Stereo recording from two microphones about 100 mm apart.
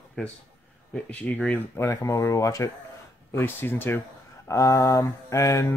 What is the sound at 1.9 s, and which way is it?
Mantra, 30° left (ahead or behind).